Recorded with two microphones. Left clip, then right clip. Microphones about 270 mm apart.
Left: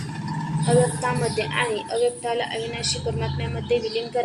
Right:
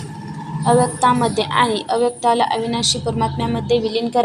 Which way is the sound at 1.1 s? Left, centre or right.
Right.